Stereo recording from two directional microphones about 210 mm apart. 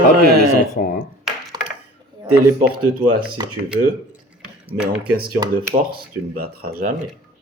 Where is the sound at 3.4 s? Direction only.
20° right (ahead or behind).